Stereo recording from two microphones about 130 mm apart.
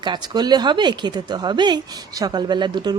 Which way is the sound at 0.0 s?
35° right (ahead or behind).